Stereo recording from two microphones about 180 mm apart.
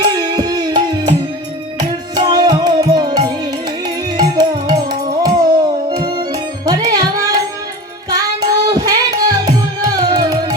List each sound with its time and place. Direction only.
0.0 s music: 20° right (ahead or behind)